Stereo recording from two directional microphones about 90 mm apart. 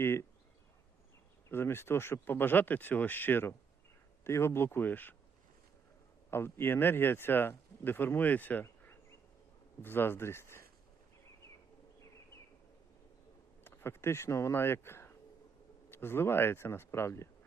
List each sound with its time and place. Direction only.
0.0 s speech: 25° left (ahead or behind)
1.5 s speech: 25° left (ahead or behind)
6.3 s speech: 25° left (ahead or behind)
13.7 s speech: 25° left (ahead or behind)